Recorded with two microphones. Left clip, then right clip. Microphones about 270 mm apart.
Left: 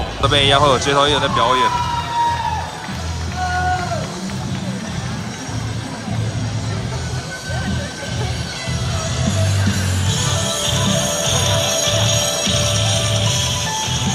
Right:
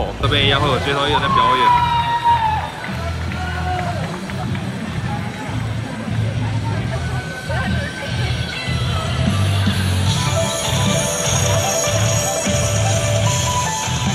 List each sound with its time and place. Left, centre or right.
0.2 s speech: centre
10.4 s music: right